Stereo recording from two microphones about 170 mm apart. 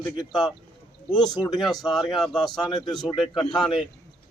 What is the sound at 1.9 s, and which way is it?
A man's voice, centre (ahead or behind).